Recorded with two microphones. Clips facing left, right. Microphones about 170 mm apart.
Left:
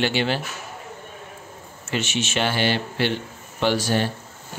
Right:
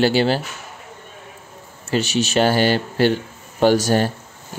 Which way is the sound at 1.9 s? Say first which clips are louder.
Right 6 dB; 35° right (ahead or behind).